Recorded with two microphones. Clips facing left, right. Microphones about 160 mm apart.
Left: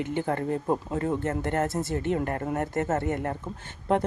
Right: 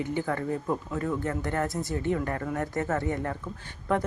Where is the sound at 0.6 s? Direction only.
35° left (ahead or behind).